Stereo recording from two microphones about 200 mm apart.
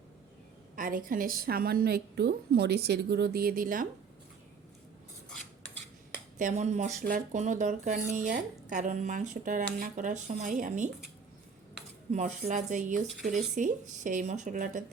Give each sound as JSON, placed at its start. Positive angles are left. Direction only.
{"t": 0.8, "sound": "a woman's voice", "side_deg": -45}
{"t": 6.4, "sound": "speech", "side_deg": -35}
{"t": 12.1, "sound": "speech", "side_deg": -40}